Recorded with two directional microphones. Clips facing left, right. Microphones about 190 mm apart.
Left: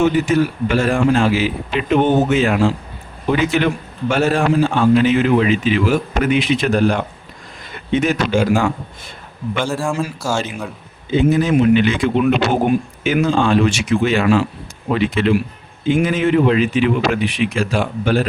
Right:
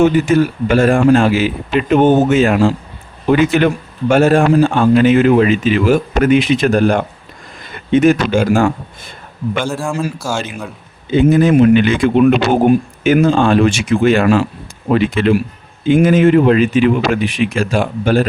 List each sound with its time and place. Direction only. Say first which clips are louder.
0.0 s a man's voice: right 4 dB; 50° right (ahead or behind)
9.6 s a man's voice: right 1 dB; centre (ahead or behind)
11.2 s a man's voice: right 5 dB; 55° right (ahead or behind)